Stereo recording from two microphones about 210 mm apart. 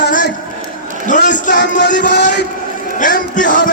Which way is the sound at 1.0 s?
35° left (ahead or behind).